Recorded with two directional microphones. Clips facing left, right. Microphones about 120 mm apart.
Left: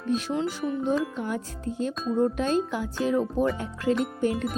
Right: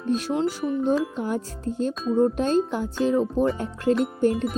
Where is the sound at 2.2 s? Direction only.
35° right (ahead or behind).